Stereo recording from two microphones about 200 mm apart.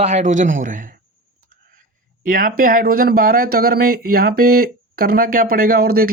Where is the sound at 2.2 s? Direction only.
45° right (ahead or behind).